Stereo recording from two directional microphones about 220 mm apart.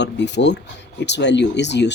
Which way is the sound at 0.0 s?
50° left (ahead or behind).